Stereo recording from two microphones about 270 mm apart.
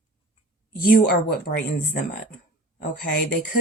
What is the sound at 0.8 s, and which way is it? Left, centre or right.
Speech, left.